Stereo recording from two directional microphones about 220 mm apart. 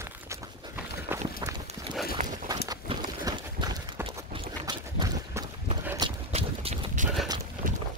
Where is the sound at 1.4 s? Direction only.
15° right (ahead or behind).